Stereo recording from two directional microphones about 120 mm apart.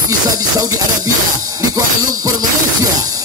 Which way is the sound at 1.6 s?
30° right (ahead or behind).